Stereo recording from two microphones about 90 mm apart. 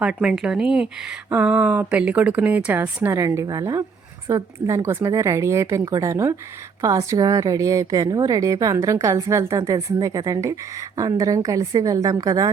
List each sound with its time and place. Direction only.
0.0 s speech: 10° right (ahead or behind)
3.1 s a woman's voice: 35° right (ahead or behind)